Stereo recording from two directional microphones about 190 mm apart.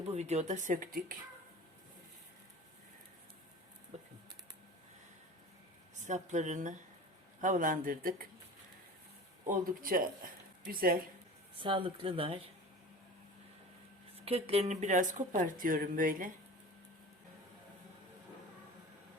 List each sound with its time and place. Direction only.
0.1 s speech: 35° right (ahead or behind)
6.1 s a man's voice: 40° right (ahead or behind)
9.5 s a man's voice: 50° right (ahead or behind)
11.6 s speech: 25° right (ahead or behind)
14.3 s speech: 30° right (ahead or behind); by 16.3 s 45° right (ahead or behind)